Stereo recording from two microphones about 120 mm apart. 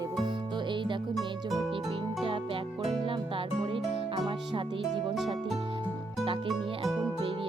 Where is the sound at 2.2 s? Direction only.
45° right (ahead or behind).